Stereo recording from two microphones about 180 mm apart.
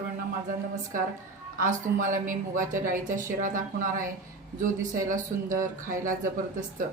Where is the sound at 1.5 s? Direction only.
45° right (ahead or behind).